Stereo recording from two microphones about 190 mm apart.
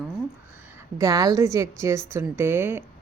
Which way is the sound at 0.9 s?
15° right (ahead or behind).